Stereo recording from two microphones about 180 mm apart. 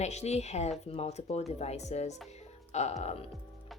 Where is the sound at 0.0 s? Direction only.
40° left (ahead or behind).